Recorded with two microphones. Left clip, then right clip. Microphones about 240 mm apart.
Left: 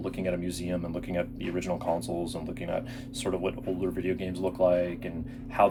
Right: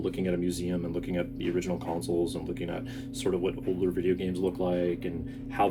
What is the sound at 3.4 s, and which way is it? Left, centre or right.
Speech, centre.